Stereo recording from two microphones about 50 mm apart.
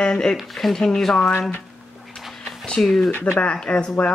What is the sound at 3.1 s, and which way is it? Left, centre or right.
Speech, left.